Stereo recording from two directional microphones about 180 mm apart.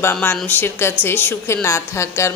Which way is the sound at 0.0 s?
10° left (ahead or behind).